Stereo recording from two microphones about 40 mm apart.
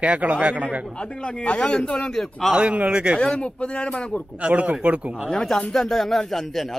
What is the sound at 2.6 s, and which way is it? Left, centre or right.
Speech, right.